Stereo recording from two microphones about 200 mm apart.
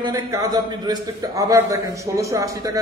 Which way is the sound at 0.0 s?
15° right (ahead or behind).